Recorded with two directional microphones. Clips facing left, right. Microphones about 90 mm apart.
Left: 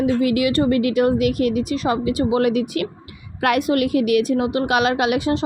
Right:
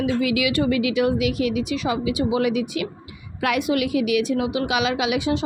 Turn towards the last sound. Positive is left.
turn(degrees=45)  # may be behind; listen again after turning